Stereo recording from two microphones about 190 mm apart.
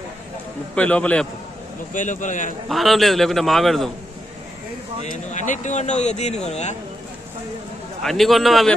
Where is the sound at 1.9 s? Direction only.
40° left (ahead or behind).